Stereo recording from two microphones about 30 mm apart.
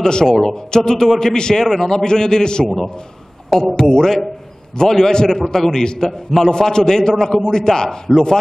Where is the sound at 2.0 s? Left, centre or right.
Left.